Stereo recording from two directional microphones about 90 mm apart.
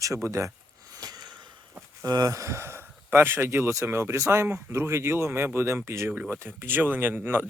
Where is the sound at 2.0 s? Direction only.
45° right (ahead or behind).